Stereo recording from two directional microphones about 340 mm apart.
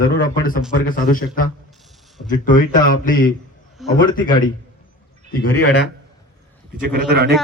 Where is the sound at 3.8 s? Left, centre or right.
Centre.